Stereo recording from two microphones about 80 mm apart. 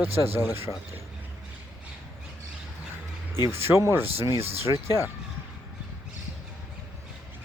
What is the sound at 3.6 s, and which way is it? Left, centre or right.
Speech, right.